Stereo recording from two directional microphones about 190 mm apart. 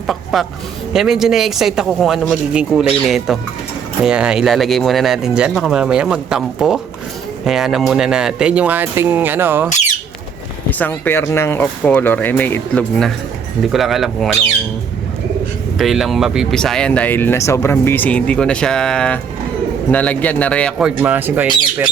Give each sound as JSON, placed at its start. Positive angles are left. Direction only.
{"t": 0.1, "sound": "speech", "side_deg": 0}
{"t": 9.6, "sound": "a sound", "side_deg": 40}
{"t": 10.7, "sound": "speech", "side_deg": 10}
{"t": 15.8, "sound": "speech", "side_deg": 0}